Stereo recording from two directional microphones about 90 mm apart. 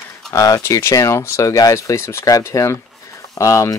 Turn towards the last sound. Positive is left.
turn(degrees=35)  # may be behind; listen again after turning